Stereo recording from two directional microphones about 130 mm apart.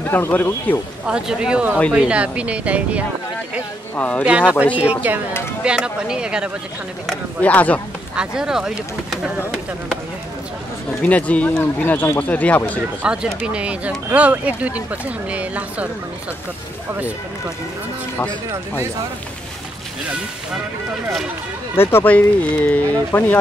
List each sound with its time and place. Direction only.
0.0 s speech: 15° left (ahead or behind)
1.0 s speech: 5° right (ahead or behind)
3.9 s speech: 10° left (ahead or behind)
4.2 s speech: 10° right (ahead or behind)
7.1 s speech: 10° left (ahead or behind)
8.2 s speech: 5° right (ahead or behind)
11.0 s speech: 10° left (ahead or behind)
13.0 s speech: 10° right (ahead or behind)
21.7 s speech: 15° left (ahead or behind)